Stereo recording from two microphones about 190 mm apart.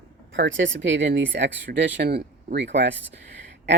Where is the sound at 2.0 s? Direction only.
60° right (ahead or behind).